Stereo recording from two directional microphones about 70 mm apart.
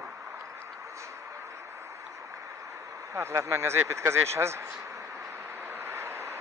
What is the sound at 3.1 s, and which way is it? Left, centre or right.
Speech, right.